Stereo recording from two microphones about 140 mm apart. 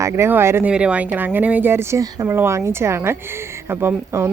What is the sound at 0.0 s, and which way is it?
Speech, 15° right (ahead or behind).